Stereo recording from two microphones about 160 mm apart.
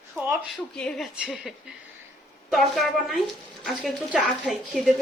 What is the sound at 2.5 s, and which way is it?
Speech, centre (ahead or behind).